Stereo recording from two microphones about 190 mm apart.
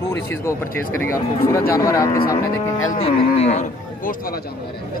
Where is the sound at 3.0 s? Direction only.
35° left (ahead or behind).